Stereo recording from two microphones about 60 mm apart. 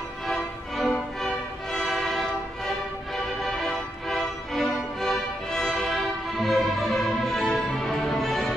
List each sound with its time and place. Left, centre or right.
0.3 s music: centre